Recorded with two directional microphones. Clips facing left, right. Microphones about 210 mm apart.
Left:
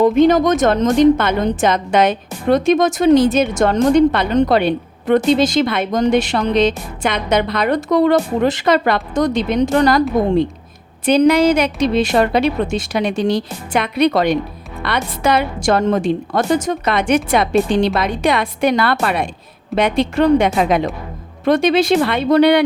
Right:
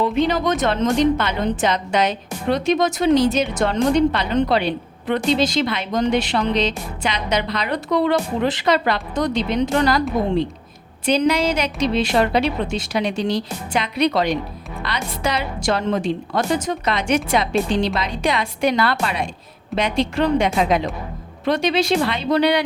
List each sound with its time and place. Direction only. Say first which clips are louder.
0.0 s a woman's voice: left 7 dB; 50° left (ahead or behind)